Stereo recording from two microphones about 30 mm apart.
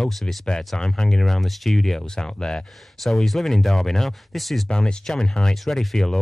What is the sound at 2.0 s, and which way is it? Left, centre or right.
Speech, left.